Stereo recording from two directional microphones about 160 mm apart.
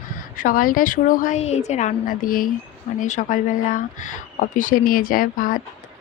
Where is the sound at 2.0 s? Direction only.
60° left (ahead or behind).